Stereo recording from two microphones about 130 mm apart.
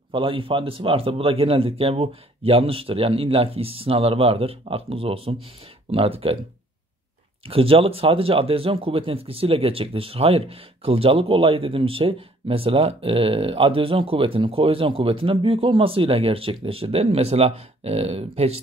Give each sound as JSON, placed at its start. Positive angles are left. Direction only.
{"t": 0.1, "sound": "speech", "side_deg": -45}
{"t": 7.4, "sound": "speech", "side_deg": -45}